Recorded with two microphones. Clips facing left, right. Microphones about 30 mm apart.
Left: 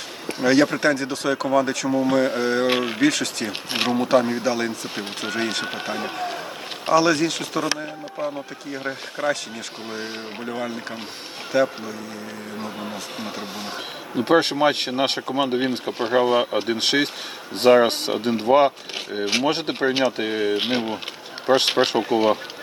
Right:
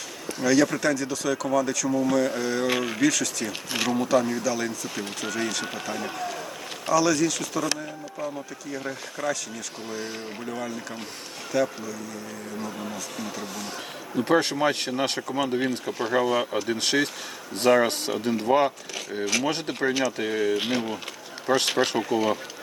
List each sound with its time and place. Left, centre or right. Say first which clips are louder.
0.3 s speech: left 3 dB; left
10.5 s speech: left 5 dB; left
14.2 s speech: left 4 dB; left